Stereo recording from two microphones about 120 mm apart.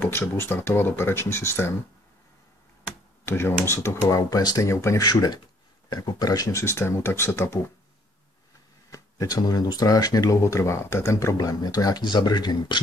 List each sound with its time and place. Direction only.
0.0 s speech: 15° left (ahead or behind)
3.3 s speech: 20° left (ahead or behind)
8.9 s speech: 30° left (ahead or behind)